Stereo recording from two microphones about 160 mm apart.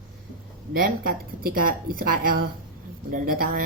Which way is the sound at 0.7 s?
65° right (ahead or behind).